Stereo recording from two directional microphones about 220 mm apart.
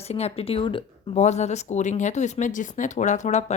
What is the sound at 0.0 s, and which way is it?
Speech, 30° left (ahead or behind).